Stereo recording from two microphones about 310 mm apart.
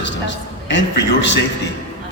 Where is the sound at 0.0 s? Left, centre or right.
Left.